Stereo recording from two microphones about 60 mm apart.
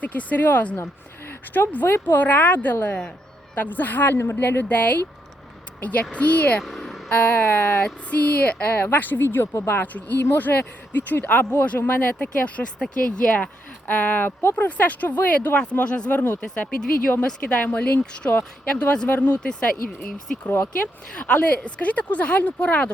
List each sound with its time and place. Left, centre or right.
0.0 s speech: left
0.8 s speech: left
6.6 s vehicle: centre
7.1 s speech: left
7.4 s speech: left
8.1 s speech: left
9.6 s speech: left; by 13.3 s centre
13.3 s speech: left
18.0 s speech: centre
20.5 s speech: left
21.2 s speech: left